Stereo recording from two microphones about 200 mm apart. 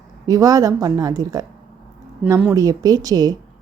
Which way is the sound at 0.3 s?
15° right (ahead or behind).